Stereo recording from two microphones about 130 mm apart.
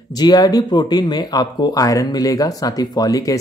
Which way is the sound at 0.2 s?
30° left (ahead or behind).